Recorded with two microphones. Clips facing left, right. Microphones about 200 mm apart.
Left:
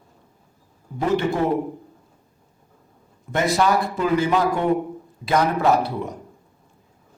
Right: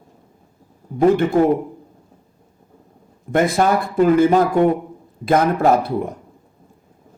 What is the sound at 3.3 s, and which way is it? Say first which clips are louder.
A man's voice: right 3 dB; 55° right (ahead or behind).